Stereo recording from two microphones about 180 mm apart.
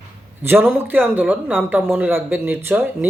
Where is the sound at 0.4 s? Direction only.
10° right (ahead or behind).